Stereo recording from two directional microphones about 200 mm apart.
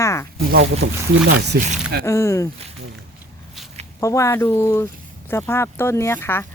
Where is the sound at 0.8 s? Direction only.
55° right (ahead or behind).